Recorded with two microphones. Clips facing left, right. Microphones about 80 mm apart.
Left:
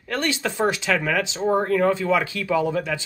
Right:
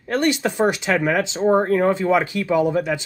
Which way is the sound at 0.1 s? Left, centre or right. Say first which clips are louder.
Right 5 dB; right.